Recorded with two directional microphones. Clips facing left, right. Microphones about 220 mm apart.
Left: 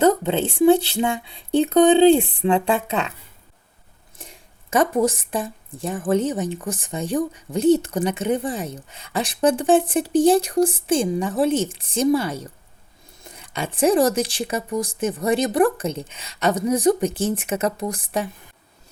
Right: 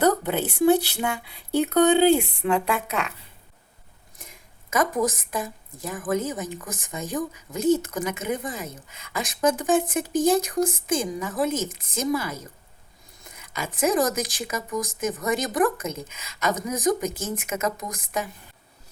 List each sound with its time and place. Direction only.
0.0 s speech: 25° left (ahead or behind)
4.2 s speech: 30° left (ahead or behind)